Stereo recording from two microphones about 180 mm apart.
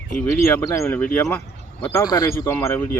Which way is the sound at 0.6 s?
15° left (ahead or behind).